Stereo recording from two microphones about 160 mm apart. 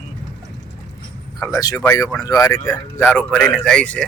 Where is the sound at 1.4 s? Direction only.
20° left (ahead or behind); by 4.0 s 5° left (ahead or behind).